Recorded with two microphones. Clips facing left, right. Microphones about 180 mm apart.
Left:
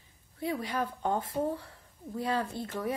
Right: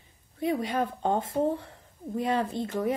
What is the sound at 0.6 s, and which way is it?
Speech, 25° right (ahead or behind).